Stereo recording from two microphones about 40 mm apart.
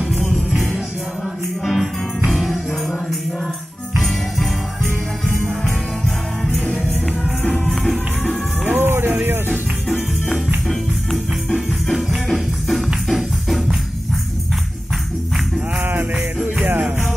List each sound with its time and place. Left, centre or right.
1.6 s music: centre
7.5 s music: centre
8.6 s music: right
12.3 s music: centre
15.8 s jingle bell: right